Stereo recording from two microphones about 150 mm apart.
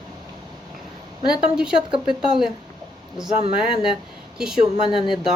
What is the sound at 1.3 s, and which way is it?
Speech, 5° right (ahead or behind).